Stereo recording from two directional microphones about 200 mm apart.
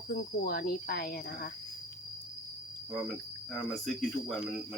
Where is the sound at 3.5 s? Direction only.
Centre (ahead or behind).